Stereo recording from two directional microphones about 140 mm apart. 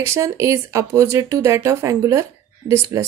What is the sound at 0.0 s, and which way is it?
Speech, 20° right (ahead or behind).